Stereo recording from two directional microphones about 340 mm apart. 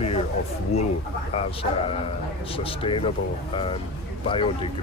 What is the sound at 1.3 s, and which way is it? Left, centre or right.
Speech, centre.